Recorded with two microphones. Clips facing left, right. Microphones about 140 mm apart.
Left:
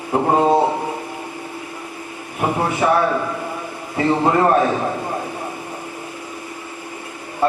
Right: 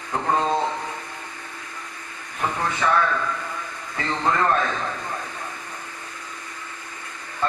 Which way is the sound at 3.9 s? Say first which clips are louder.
Left 7 dB; 15° left (ahead or behind).